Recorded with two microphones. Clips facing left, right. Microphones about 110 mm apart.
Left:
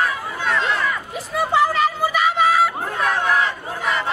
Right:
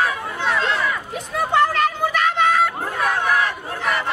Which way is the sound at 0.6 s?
Centre (ahead or behind).